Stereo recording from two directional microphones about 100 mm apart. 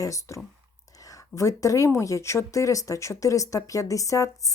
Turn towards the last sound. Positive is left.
turn(degrees=35)  # may be behind; listen again after turning